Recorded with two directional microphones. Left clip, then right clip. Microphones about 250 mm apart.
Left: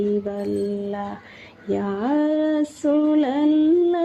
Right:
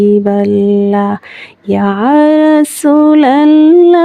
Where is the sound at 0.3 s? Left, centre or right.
Right.